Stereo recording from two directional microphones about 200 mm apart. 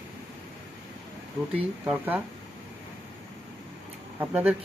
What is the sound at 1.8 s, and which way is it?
Speech, 10° right (ahead or behind).